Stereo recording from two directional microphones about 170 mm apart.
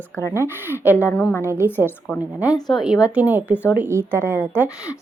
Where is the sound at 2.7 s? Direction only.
Centre (ahead or behind).